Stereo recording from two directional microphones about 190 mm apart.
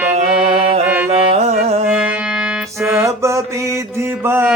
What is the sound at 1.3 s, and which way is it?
Carnatic music, 35° right (ahead or behind).